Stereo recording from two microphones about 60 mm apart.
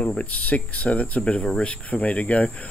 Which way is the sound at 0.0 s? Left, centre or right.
Left.